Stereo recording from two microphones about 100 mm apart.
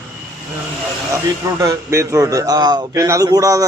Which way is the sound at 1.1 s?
30° right (ahead or behind).